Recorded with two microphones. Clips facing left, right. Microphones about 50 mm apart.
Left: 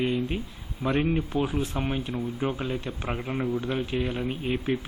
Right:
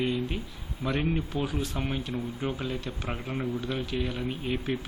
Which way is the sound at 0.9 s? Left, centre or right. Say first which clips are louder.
Left 4 dB; centre.